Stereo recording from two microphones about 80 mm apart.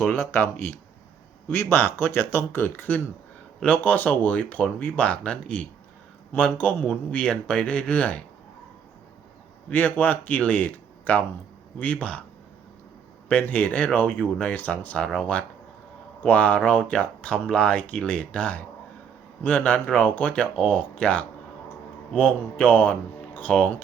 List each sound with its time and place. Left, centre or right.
0.1 s speech: left
9.6 s speech: left
13.2 s speech: centre
15.0 s speech: centre